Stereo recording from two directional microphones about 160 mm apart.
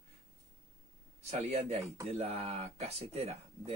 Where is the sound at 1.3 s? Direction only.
45° right (ahead or behind).